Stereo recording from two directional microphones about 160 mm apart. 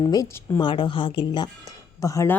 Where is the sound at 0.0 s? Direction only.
25° left (ahead or behind).